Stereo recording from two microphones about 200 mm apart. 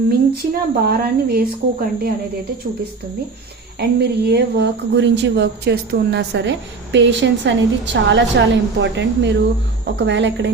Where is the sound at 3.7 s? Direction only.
55° right (ahead or behind).